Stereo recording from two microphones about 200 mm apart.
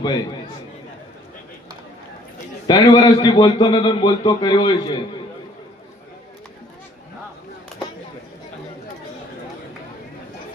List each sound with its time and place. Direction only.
2.6 s a man's voice: 20° left (ahead or behind)